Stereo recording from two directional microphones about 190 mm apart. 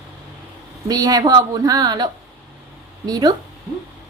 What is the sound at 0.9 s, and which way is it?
Speech, 20° right (ahead or behind).